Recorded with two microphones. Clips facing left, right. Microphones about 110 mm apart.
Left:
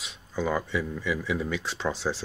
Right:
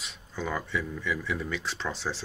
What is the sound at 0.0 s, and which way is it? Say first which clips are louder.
Speech: left 5 dB; 5° left (ahead or behind).